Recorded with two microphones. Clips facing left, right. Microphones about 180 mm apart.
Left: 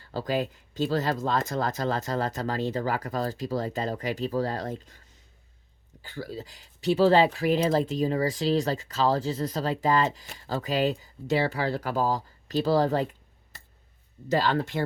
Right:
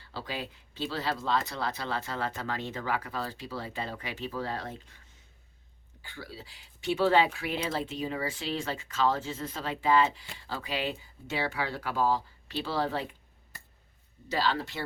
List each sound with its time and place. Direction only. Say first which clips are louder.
0.0 s speech: left 9 dB; 45° left (ahead or behind)
14.3 s speech: left 5 dB; 50° left (ahead or behind)